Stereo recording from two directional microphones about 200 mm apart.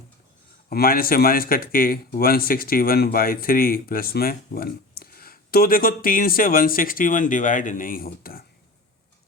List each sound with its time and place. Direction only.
0.7 s a man's voice: 50° left (ahead or behind)